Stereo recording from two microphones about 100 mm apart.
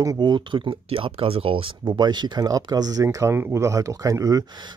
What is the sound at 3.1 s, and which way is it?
Speech, 25° right (ahead or behind).